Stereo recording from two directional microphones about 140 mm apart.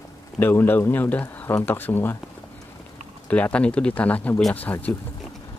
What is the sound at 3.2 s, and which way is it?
Speech, 10° left (ahead or behind).